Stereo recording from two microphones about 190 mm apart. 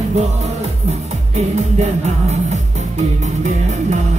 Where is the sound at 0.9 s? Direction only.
35° right (ahead or behind).